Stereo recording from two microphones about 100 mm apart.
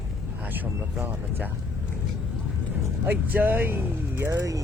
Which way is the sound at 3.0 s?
20° right (ahead or behind).